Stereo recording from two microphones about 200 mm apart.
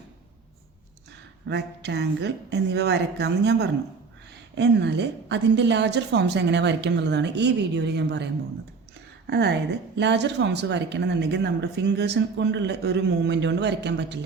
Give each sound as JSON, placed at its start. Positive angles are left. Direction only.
{"t": 1.5, "sound": "a woman's voice", "side_deg": -60}